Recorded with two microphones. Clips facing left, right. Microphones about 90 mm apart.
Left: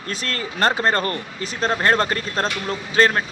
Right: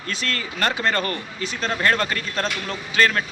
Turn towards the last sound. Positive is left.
turn(degrees=30)  # may be behind; listen again after turning